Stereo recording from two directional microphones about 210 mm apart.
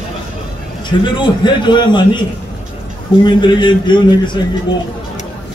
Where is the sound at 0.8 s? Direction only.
20° left (ahead or behind).